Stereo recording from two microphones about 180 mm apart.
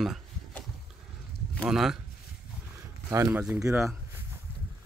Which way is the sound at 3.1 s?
15° right (ahead or behind).